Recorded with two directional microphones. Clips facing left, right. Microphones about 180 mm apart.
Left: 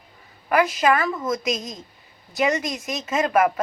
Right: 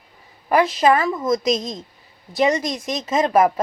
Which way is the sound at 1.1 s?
10° right (ahead or behind).